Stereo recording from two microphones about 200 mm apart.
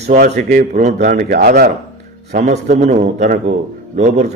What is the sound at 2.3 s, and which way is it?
A man's voice, 40° right (ahead or behind).